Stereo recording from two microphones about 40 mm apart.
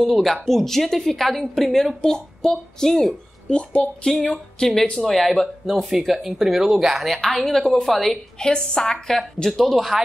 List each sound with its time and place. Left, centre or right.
0.0 s a woman's voice: centre
3.4 s a woman's voice: left
4.0 s speech: centre
5.7 s a woman's voice: centre
7.4 s speech: centre
8.4 s a woman's voice: centre
8.9 s a woman's voice: centre